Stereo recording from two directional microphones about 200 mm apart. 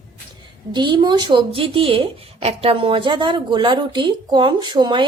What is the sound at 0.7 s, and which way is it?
A woman's voice, 25° right (ahead or behind).